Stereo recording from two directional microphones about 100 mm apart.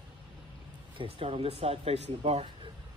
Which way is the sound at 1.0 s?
70° right (ahead or behind).